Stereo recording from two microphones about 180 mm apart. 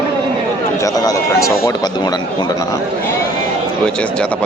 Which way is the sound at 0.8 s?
20° left (ahead or behind).